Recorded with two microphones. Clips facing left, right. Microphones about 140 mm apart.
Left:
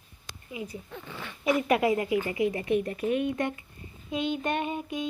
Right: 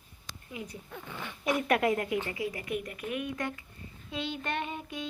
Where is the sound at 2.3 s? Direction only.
25° left (ahead or behind).